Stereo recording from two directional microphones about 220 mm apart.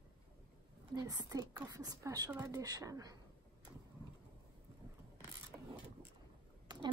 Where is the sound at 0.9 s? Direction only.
15° right (ahead or behind).